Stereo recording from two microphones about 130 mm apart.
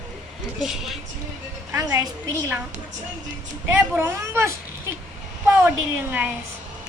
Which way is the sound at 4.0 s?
20° right (ahead or behind).